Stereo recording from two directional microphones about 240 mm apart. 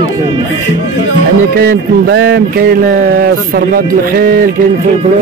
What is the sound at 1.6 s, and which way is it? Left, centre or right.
Speech, right.